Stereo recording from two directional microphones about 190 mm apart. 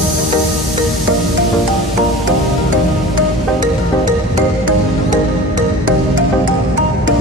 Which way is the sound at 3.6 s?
20° right (ahead or behind).